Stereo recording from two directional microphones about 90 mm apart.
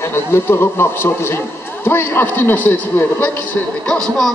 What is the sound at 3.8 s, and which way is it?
Speech, 5° left (ahead or behind).